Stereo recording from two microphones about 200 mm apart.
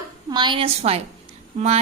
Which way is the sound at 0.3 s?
20° right (ahead or behind).